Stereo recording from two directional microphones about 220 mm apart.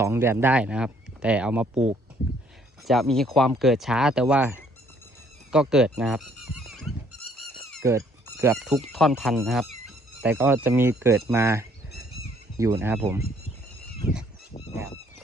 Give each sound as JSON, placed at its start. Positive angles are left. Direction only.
{"t": 0.0, "sound": "speech", "side_deg": -10}
{"t": 2.8, "sound": "speech", "side_deg": 0}
{"t": 7.8, "sound": "a sound", "side_deg": -10}
{"t": 8.5, "sound": "speech", "side_deg": 0}